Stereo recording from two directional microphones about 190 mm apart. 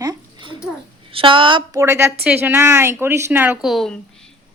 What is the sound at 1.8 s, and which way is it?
A woman's voice, 15° right (ahead or behind).